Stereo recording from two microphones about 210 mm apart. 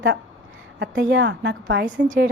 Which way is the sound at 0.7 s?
55° right (ahead or behind).